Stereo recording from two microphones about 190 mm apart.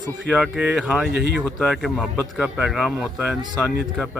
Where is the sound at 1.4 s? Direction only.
5° left (ahead or behind).